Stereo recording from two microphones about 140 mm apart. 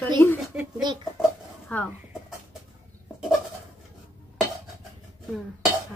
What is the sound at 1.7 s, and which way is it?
Speech, 10° left (ahead or behind).